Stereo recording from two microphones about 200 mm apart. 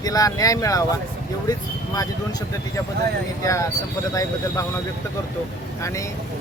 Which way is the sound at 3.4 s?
15° left (ahead or behind).